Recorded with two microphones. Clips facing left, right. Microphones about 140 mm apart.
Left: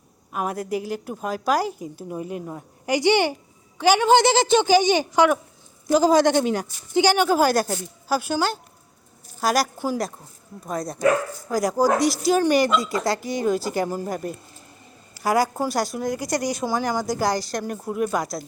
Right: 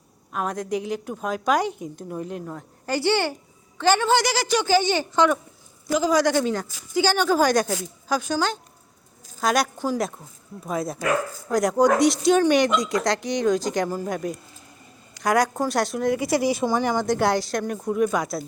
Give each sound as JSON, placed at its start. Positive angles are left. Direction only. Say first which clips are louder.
{"t": 0.3, "sound": "a woman's voice", "louder": "even", "side_deg": 5}
{"t": 5.9, "sound": "a woman's voice", "louder": "left 3 dB", "side_deg": 30}
{"t": 10.7, "sound": "speech", "louder": "left 3 dB", "side_deg": 0}